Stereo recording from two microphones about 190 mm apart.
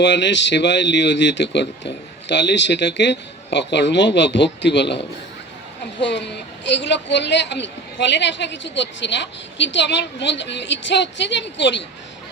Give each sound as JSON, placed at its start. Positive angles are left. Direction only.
{"t": 0.0, "sound": "a woman's voice", "side_deg": 70}
{"t": 6.0, "sound": "a woman's voice", "side_deg": 65}